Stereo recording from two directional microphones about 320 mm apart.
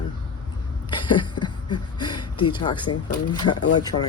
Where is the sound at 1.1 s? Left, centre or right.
Centre.